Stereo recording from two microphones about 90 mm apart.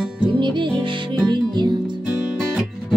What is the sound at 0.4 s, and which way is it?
Music, 60° right (ahead or behind).